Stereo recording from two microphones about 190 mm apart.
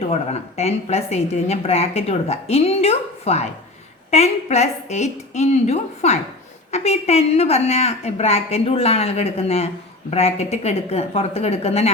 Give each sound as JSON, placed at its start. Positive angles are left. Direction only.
{"t": 0.1, "sound": "a woman's voice", "side_deg": 35}